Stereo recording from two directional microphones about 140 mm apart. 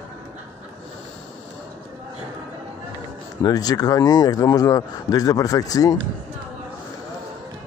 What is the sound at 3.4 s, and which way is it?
Speech, 30° left (ahead or behind).